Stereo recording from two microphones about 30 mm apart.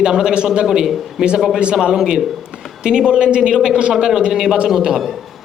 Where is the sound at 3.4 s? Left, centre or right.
Right.